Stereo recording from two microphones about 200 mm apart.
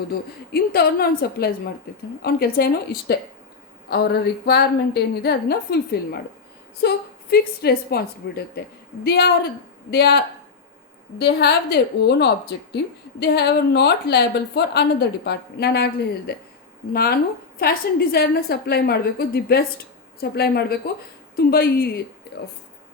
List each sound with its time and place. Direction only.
0.5 s a woman's voice: 50° left (ahead or behind)
11.2 s a woman's voice: 55° left (ahead or behind)